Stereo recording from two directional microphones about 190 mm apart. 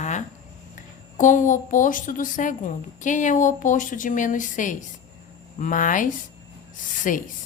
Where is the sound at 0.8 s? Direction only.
40° left (ahead or behind).